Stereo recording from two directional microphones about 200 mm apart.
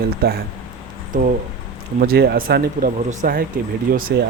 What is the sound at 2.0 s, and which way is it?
Speech, 50° right (ahead or behind).